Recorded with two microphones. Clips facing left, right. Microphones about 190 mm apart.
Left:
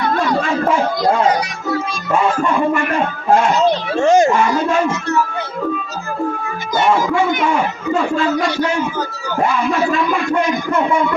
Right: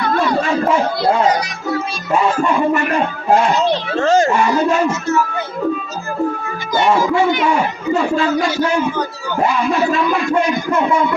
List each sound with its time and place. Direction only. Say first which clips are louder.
3.9 s a child's voice: left 2 dB; 15° left (ahead or behind)
8.4 s speech: right 1 dB; centre (ahead or behind)